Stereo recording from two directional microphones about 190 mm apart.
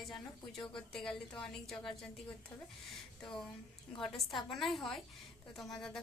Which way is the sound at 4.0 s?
Centre (ahead or behind).